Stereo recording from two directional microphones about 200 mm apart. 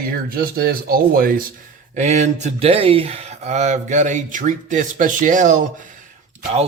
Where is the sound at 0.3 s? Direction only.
45° right (ahead or behind).